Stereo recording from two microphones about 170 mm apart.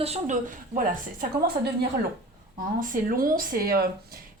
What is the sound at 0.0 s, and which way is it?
Speech, 40° right (ahead or behind).